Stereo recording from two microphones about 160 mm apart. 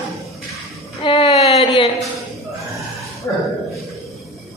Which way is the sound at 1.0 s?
40° left (ahead or behind).